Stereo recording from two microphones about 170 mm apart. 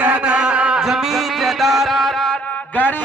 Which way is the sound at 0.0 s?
10° right (ahead or behind).